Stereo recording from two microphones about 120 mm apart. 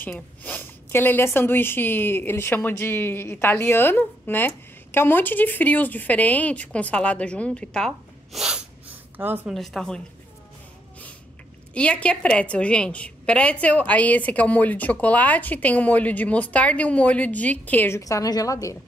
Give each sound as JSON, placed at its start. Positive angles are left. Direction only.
{"t": 0.4, "sound": "speech", "side_deg": 15}
{"t": 9.5, "sound": "speech", "side_deg": 0}
{"t": 11.7, "sound": "a woman's voice", "side_deg": 10}